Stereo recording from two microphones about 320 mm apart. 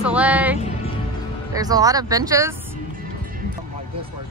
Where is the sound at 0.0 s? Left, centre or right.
Centre.